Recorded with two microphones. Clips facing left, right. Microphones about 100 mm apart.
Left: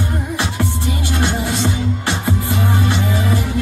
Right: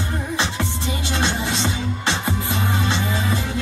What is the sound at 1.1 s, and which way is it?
Music, 20° right (ahead or behind).